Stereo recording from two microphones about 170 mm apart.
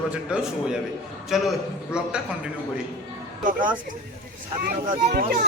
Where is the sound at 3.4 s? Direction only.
50° right (ahead or behind).